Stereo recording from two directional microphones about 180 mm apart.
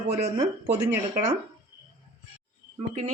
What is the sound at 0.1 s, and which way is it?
Speech, 40° right (ahead or behind).